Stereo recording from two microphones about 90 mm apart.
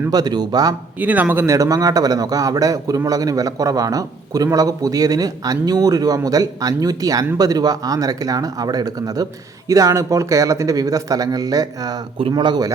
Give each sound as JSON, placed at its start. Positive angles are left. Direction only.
{"t": 0.1, "sound": "speech", "side_deg": -50}
{"t": 0.9, "sound": "speech", "side_deg": -15}
{"t": 1.5, "sound": "a man's voice", "side_deg": -40}